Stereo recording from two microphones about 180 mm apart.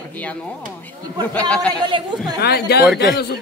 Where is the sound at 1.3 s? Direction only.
10° left (ahead or behind).